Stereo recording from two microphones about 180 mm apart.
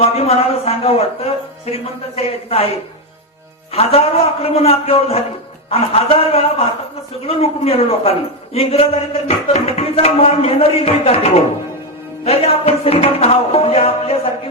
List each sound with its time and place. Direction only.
0.0 s music: 35° left (ahead or behind)
3.7 s music: 35° left (ahead or behind)